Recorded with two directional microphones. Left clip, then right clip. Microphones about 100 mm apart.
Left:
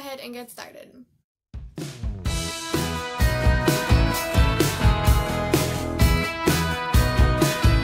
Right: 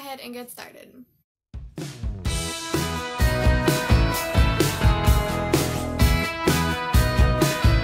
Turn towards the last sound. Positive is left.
turn(degrees=0)  # may be behind; listen again after turning